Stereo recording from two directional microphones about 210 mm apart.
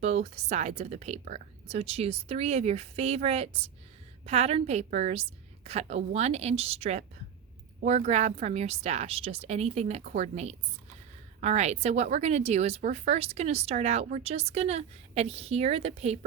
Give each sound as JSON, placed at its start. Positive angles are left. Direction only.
{"t": 0.0, "sound": "speech", "side_deg": -30}